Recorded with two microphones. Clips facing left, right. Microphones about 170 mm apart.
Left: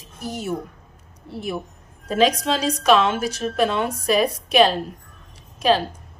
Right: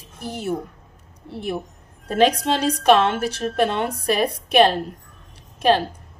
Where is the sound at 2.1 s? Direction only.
55° right (ahead or behind).